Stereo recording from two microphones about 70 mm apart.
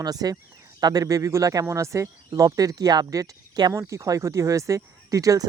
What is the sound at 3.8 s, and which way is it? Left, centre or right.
Speech, right.